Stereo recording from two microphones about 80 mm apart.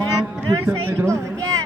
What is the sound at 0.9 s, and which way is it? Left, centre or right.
Speech, right.